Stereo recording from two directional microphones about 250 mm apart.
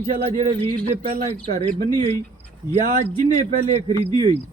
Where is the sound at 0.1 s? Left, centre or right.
Right.